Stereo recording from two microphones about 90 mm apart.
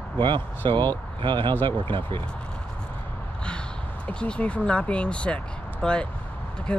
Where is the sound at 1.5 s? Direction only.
20° left (ahead or behind).